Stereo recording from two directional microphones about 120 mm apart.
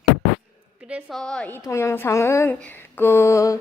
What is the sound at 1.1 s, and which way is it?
Speech, 5° left (ahead or behind).